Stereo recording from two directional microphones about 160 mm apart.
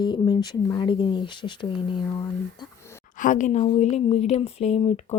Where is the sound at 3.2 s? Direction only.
55° left (ahead or behind).